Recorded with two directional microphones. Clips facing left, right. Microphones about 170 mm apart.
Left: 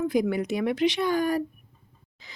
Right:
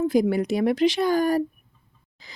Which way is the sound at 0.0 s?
35° right (ahead or behind).